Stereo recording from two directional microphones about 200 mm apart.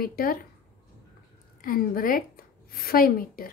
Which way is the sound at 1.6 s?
45° left (ahead or behind).